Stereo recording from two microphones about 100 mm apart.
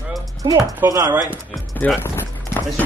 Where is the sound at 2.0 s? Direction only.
20° left (ahead or behind).